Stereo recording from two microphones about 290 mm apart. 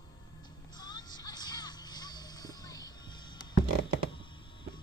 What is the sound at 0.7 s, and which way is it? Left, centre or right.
Music, centre.